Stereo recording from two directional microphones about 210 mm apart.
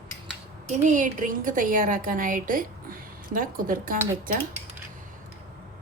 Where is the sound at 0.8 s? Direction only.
35° right (ahead or behind).